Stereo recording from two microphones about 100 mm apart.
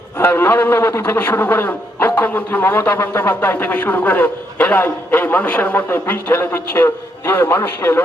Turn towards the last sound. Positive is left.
turn(degrees=20)  # may be behind; listen again after turning